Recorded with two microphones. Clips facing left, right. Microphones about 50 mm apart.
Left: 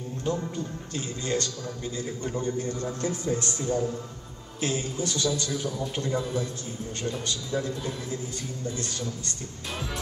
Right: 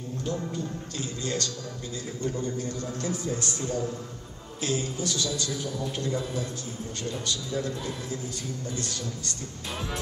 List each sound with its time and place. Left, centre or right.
0.9 s a man's voice: left